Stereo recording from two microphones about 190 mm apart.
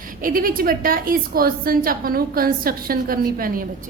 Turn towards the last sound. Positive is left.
turn(degrees=-50)  # may be behind; listen again after turning